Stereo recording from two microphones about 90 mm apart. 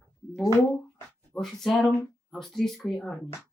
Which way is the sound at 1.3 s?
5° left (ahead or behind).